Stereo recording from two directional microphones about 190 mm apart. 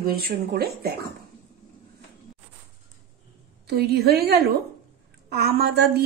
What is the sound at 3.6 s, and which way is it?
A woman's voice, 55° right (ahead or behind).